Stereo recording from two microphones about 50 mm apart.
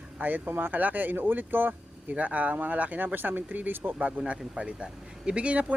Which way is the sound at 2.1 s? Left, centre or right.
Right.